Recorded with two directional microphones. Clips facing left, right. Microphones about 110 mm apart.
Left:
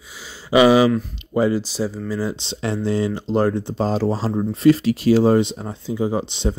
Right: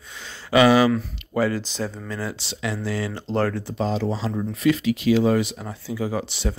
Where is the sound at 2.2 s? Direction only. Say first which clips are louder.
Left 5 dB; 20° left (ahead or behind).